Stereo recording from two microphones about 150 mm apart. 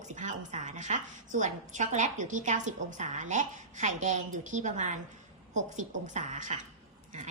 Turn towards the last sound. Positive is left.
turn(degrees=-55)  # may be behind; listen again after turning